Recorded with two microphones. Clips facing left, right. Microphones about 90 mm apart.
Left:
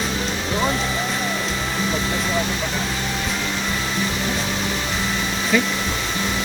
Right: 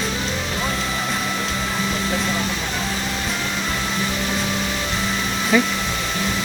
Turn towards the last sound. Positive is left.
turn(degrees=-15)  # may be behind; listen again after turning